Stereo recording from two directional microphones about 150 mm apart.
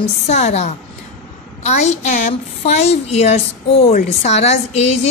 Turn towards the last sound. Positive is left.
turn(degrees=45)  # may be behind; listen again after turning